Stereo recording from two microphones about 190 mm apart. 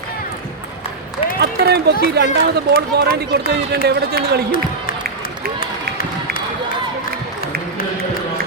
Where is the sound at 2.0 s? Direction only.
60° right (ahead or behind).